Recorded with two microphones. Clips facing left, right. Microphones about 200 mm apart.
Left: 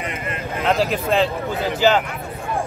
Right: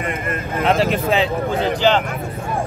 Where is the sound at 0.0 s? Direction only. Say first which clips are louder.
Right 4 dB; 50° right (ahead or behind).